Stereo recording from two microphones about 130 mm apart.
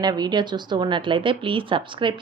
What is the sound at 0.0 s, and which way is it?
A woman's voice, 30° right (ahead or behind).